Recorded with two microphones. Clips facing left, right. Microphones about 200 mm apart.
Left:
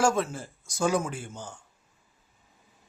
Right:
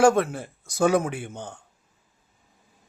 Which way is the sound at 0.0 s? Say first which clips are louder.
Right 6 dB; 60° right (ahead or behind).